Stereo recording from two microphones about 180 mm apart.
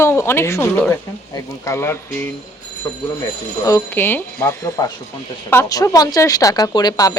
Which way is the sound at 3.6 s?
15° left (ahead or behind).